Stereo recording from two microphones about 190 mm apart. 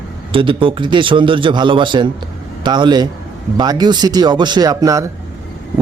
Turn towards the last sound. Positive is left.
turn(degrees=-20)  # may be behind; listen again after turning